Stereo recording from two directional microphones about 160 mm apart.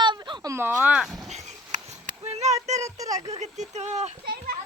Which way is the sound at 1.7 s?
45° right (ahead or behind).